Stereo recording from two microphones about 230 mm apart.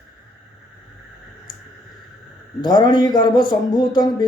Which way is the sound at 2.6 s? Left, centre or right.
Centre.